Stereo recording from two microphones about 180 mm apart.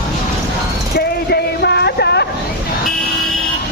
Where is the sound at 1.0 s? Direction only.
65° left (ahead or behind).